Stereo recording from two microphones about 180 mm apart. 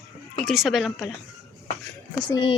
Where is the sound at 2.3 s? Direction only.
25° left (ahead or behind).